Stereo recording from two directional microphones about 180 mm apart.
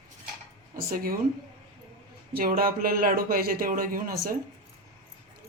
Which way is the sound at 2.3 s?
55° right (ahead or behind).